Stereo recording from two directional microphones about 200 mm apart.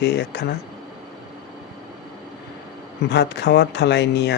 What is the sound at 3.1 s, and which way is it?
Speech, 60° left (ahead or behind).